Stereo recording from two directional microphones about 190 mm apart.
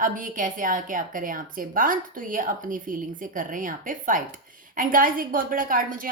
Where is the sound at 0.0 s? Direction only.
45° right (ahead or behind).